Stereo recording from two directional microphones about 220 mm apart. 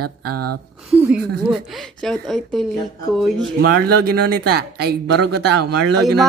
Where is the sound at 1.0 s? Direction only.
5° right (ahead or behind).